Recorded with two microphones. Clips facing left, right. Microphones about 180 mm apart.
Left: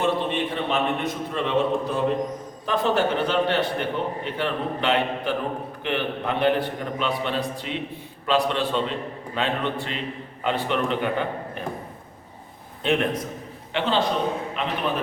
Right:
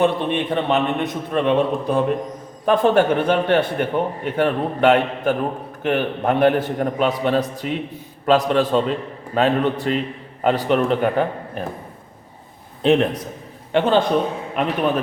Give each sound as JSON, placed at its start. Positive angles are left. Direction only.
{"t": 0.0, "sound": "a man's voice", "side_deg": -60}
{"t": 12.8, "sound": "a man's voice", "side_deg": -35}
{"t": 13.7, "sound": "a man's voice", "side_deg": -50}